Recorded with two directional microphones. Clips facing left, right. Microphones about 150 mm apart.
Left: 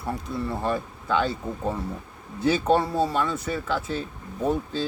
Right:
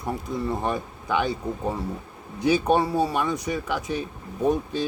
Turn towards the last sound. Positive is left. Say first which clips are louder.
# right 2 dB
turn(degrees=-15)  # may be behind; listen again after turning